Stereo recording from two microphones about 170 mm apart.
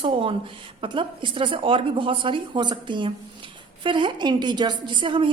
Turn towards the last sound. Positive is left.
turn(degrees=-30)  # may be behind; listen again after turning